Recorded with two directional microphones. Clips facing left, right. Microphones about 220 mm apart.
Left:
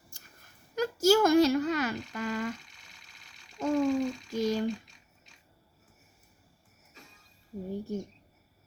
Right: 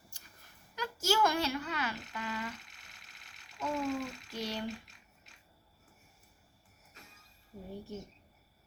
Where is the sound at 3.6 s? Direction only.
40° left (ahead or behind).